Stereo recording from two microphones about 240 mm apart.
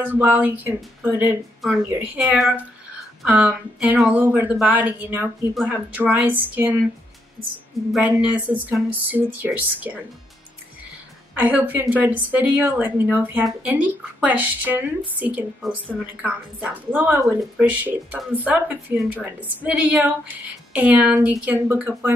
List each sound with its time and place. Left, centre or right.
0.0 s a woman's voice: centre
7.9 s a woman's voice: centre
11.3 s a woman's voice: centre